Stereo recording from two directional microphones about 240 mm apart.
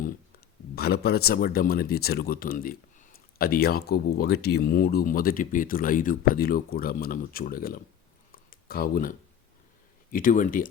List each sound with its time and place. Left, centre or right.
0.8 s speech: left
8.3 s a sound: left
10.1 s speech: left